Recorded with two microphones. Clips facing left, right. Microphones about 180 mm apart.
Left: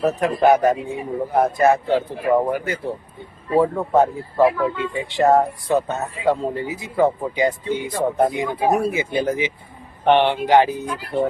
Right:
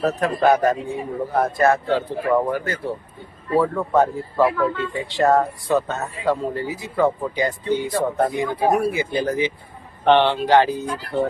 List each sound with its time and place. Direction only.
0.0 s speech: 20° left (ahead or behind)